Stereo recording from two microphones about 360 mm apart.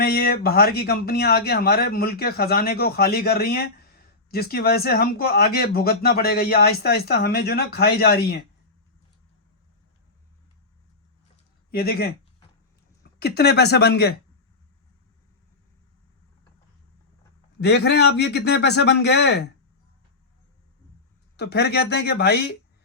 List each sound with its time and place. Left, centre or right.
0.0 s speech: left
11.7 s a sound: left
13.1 s speech: left
17.6 s speech: left
21.3 s speech: left